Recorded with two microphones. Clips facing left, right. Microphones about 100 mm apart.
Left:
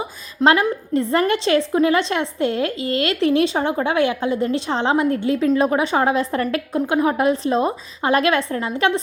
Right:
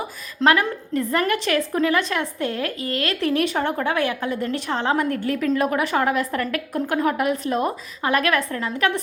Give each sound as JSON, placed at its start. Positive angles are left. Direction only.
{"t": 0.4, "sound": "a woman's voice", "side_deg": 25}